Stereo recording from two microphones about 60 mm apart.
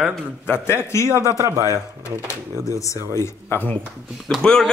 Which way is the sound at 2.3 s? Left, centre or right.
Left.